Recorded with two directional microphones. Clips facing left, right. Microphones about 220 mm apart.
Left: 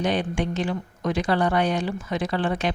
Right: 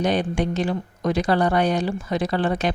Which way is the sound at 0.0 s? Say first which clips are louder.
Right 3 dB; 40° right (ahead or behind).